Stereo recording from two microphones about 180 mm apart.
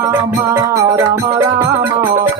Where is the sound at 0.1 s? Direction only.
15° right (ahead or behind).